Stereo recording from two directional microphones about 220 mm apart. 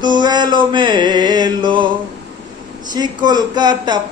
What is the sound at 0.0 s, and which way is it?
Mantra, 20° right (ahead or behind).